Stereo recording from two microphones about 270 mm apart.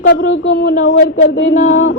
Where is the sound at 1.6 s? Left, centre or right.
Left.